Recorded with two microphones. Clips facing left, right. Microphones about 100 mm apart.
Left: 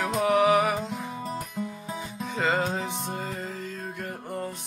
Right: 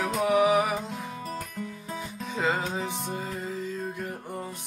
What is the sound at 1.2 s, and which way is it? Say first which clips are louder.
Music: left 3 dB; 20° left (ahead or behind).